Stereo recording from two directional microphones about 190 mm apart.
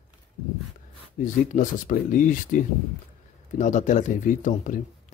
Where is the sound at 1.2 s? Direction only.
45° left (ahead or behind).